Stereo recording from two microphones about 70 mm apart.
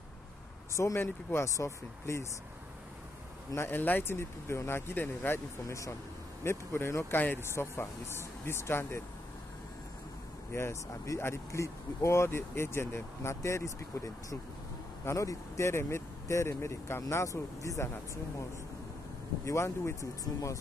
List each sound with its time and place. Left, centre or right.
0.9 s speech: left
3.5 s speech: left
5.7 s speech: left
10.5 s speech: left
17.1 s speech: left
19.4 s speech: left